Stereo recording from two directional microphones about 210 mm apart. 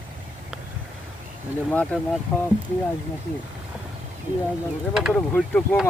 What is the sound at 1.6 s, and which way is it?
Speech, 5° left (ahead or behind).